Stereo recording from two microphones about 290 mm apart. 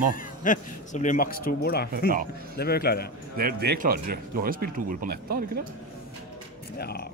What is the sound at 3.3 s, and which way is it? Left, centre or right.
Speech, right.